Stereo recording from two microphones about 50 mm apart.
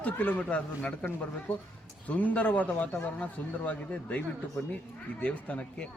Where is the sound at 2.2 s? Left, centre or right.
Left.